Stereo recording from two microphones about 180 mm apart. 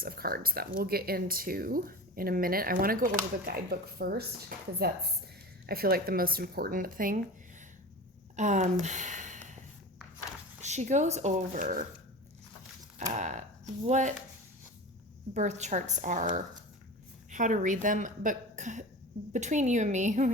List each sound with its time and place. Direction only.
0.0 s speech: 55° right (ahead or behind)
8.4 s a woman's voice: 40° right (ahead or behind)
8.8 s a sound: 40° right (ahead or behind)
10.6 s speech: 40° right (ahead or behind)
13.0 s speech: 40° right (ahead or behind)
15.4 s a woman's voice: 40° right (ahead or behind)